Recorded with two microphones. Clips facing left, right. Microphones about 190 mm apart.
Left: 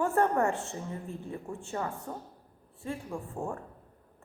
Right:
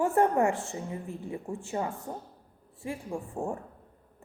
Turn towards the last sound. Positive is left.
turn(degrees=-15)  # may be behind; listen again after turning